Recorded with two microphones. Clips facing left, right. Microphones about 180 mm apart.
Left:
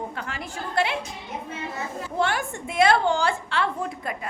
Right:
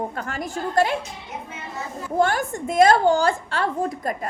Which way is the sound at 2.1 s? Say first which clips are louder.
Right 5 dB; 45° right (ahead or behind).